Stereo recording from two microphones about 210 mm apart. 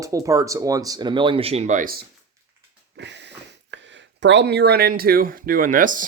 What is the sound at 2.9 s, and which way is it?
Speech, 55° right (ahead or behind).